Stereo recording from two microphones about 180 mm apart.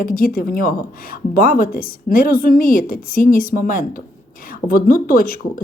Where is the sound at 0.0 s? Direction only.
50° left (ahead or behind).